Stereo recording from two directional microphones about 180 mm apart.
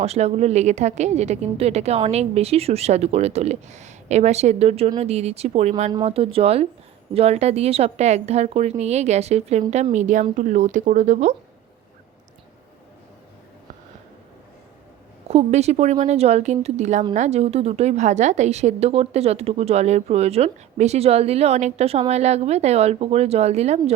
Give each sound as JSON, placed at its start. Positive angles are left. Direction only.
{"t": 0.0, "sound": "a woman's voice", "side_deg": -35}
{"t": 15.3, "sound": "a woman's voice", "side_deg": -35}